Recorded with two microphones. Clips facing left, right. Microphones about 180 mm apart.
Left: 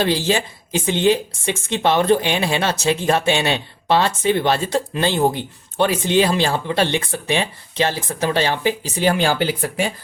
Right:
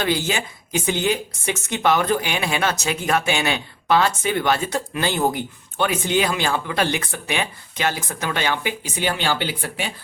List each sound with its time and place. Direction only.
0.0 s speech: 30° left (ahead or behind)